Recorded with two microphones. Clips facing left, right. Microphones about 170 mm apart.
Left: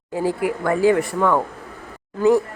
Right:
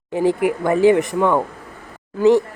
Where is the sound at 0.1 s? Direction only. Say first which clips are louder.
Right 4 dB; 20° right (ahead or behind).